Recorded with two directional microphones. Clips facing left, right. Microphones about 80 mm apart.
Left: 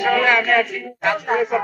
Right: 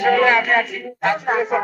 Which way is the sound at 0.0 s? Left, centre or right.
Right.